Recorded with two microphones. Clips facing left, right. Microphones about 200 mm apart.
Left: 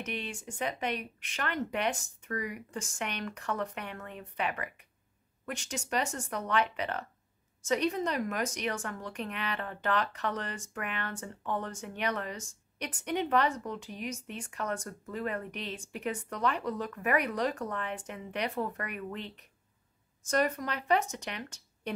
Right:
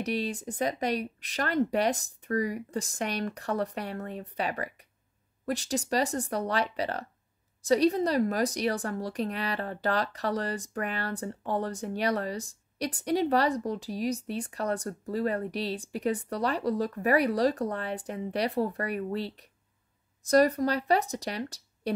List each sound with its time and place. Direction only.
0.0 s a woman's voice: 35° right (ahead or behind)